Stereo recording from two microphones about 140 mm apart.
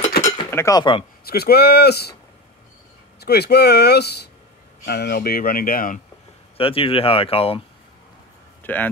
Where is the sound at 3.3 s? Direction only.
90° left.